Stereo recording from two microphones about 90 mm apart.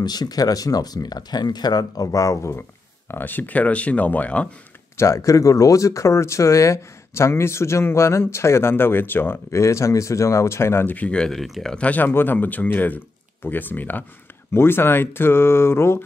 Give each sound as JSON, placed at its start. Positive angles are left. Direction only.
{"t": 0.0, "sound": "speech", "side_deg": 50}
{"t": 3.1, "sound": "speech", "side_deg": 20}
{"t": 4.9, "sound": "speech", "side_deg": 35}
{"t": 11.7, "sound": "speech", "side_deg": 15}